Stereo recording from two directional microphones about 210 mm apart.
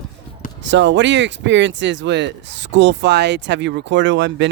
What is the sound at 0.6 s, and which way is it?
Speech, 60° right (ahead or behind).